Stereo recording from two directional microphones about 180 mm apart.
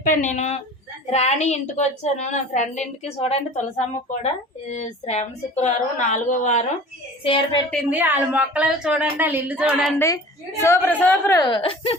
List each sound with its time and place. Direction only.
0.0 s a woman's voice: 45° left (ahead or behind)
4.7 s a woman's voice: 40° left (ahead or behind)
7.3 s speech: 30° left (ahead or behind)
7.9 s speech: 10° right (ahead or behind)
10.6 s a woman's voice: 15° left (ahead or behind)
11.4 s speech: 30° left (ahead or behind)